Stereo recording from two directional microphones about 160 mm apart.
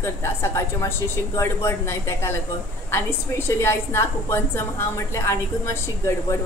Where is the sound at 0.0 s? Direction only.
15° left (ahead or behind).